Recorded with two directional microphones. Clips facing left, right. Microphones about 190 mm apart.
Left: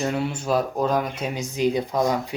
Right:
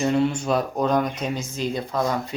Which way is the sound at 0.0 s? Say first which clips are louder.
Right 4 dB; 5° left (ahead or behind).